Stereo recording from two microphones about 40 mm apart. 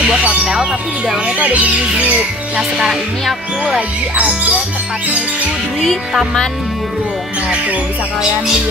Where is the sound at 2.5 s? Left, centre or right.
Centre.